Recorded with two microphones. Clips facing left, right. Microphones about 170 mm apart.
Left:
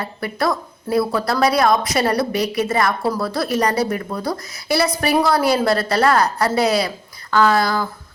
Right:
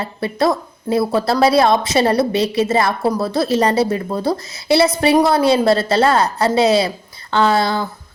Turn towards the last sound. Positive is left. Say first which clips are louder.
# right 1 dB
turn(degrees=-25)  # may be behind; listen again after turning